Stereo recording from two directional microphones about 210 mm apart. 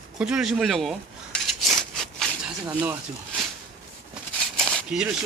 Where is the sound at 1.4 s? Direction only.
Centre (ahead or behind).